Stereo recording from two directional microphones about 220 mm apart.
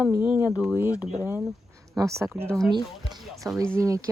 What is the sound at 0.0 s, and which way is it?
Speech, 5° right (ahead or behind).